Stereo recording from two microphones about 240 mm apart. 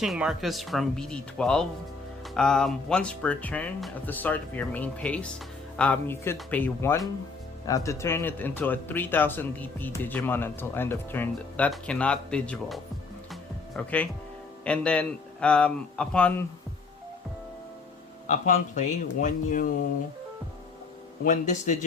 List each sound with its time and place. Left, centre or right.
0.0 s speech: centre
18.3 s speech: left
21.2 s speech: left